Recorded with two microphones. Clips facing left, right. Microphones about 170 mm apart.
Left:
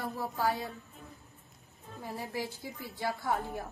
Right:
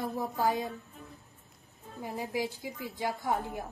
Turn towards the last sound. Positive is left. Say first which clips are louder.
# right 1 dB
turn(degrees=-15)  # may be behind; listen again after turning